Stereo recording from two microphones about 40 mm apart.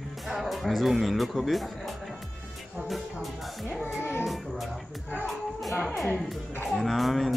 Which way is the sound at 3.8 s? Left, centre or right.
Left.